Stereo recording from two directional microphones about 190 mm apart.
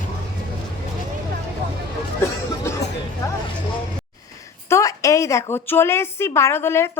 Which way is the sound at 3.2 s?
15° left (ahead or behind).